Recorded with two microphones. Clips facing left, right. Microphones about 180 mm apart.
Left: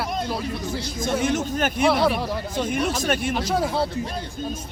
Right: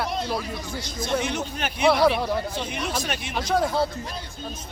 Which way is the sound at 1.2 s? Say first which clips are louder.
Left 6 dB; 45° left (ahead or behind).